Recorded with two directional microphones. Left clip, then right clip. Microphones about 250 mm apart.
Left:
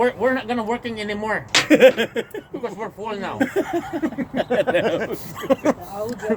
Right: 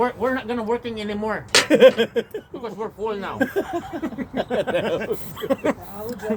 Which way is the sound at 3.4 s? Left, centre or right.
Centre.